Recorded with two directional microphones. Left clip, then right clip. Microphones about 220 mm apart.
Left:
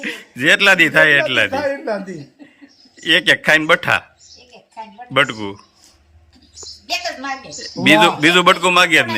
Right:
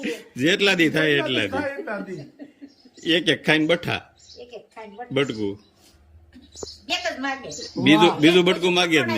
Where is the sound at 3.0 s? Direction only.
5° right (ahead or behind).